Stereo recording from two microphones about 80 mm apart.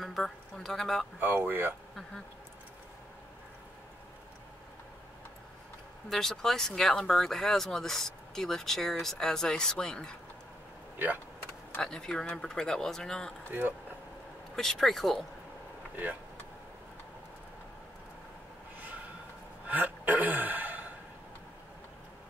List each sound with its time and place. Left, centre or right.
0.0 s speech: centre
1.2 s speech: right
6.0 s speech: centre
11.8 s speech: centre
13.5 s speech: right
14.5 s speech: centre
19.7 s speech: right